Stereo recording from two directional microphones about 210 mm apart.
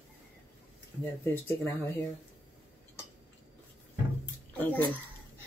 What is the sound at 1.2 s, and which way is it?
Speech, 10° left (ahead or behind).